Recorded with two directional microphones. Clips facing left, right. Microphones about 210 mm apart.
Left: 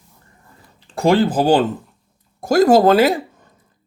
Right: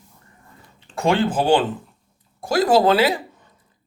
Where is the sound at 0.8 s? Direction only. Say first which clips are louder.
Left 4 dB; 35° left (ahead or behind).